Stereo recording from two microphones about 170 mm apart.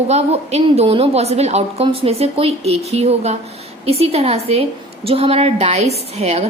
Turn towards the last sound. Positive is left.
turn(degrees=-40)  # may be behind; listen again after turning